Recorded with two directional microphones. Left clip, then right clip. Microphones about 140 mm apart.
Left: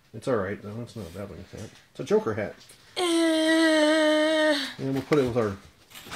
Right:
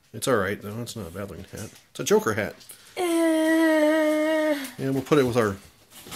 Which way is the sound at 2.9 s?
35° right (ahead or behind).